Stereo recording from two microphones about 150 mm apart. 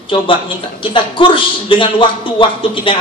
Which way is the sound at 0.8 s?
35° left (ahead or behind).